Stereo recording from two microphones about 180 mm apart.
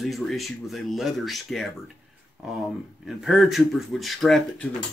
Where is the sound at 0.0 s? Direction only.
Centre (ahead or behind).